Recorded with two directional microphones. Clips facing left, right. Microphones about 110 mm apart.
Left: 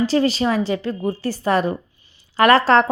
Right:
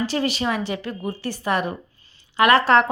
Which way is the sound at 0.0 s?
30° left (ahead or behind).